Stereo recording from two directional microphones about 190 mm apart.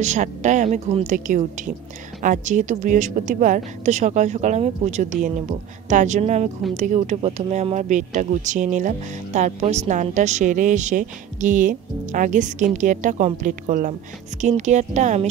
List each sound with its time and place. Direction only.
0.0 s a woman's voice: 40° right (ahead or behind)